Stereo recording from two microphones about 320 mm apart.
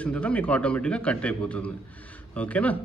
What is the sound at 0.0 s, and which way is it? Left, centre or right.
A man's voice, centre.